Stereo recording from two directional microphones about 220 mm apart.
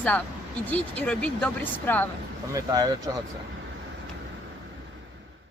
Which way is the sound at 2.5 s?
15° right (ahead or behind).